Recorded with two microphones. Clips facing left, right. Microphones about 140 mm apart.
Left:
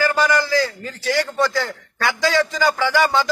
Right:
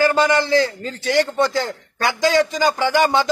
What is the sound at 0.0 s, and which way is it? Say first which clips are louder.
A man's voice: right 2 dB; 25° right (ahead or behind).